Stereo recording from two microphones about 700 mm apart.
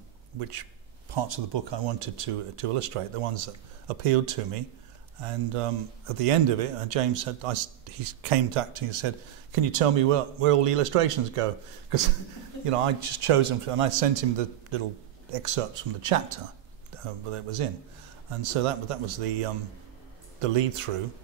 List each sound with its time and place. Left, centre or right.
0.4 s a man's voice: right
12.6 s a man's voice: right
16.9 s a sound: right
17.3 s a man's voice: right